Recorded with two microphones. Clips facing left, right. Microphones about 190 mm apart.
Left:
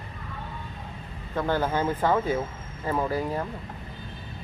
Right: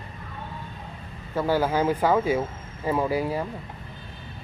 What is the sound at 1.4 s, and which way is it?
Speech, 10° right (ahead or behind).